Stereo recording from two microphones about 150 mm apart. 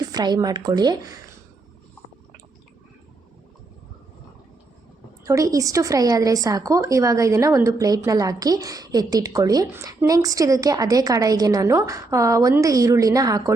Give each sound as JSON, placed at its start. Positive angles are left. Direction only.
{"t": 0.0, "sound": "speech", "side_deg": -25}
{"t": 5.2, "sound": "speech", "side_deg": -20}